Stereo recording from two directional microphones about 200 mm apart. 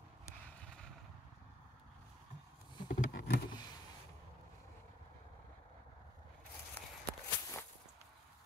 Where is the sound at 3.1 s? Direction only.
50° left (ahead or behind).